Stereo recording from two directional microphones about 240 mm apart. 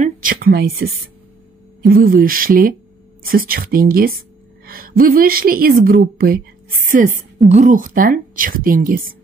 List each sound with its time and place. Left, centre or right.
0.0 s a woman's voice: right